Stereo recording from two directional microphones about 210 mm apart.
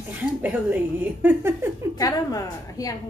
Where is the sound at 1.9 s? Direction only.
15° left (ahead or behind).